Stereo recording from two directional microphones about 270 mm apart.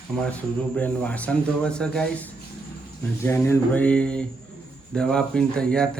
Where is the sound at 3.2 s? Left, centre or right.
Centre.